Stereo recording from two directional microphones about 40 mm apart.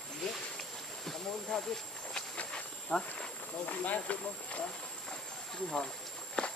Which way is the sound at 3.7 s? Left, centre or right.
Left.